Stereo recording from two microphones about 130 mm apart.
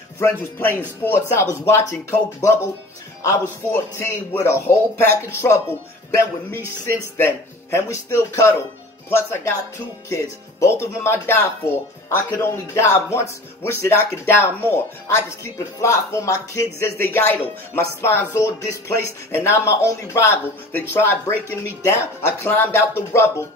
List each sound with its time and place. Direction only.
0.2 s speech: 15° left (ahead or behind)